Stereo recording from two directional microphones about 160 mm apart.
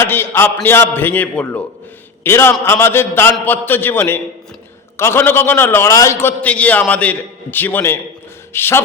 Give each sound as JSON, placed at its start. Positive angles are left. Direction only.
{"t": 0.0, "sound": "a man's voice", "side_deg": 15}